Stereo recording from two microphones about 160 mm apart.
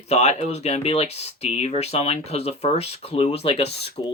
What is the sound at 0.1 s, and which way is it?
Speech, 40° left (ahead or behind).